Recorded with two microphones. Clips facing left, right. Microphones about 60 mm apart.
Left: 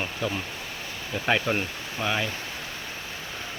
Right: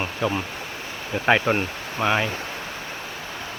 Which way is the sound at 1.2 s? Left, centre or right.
Right.